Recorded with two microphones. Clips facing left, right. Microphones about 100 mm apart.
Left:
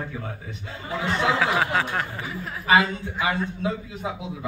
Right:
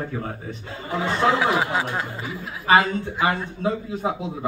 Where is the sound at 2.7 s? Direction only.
35° right (ahead or behind).